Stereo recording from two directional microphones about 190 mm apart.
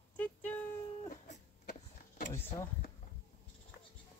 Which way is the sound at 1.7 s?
45° left (ahead or behind).